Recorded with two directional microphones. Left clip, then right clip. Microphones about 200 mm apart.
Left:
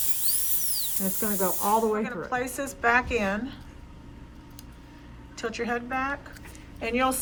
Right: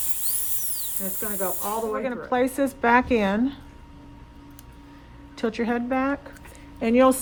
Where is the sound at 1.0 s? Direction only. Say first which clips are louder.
Even; 10° left (ahead or behind).